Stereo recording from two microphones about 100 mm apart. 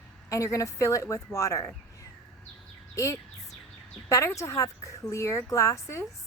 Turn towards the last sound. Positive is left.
turn(degrees=30)  # may be behind; listen again after turning